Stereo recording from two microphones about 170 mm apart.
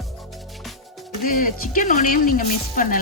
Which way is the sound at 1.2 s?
55° left (ahead or behind).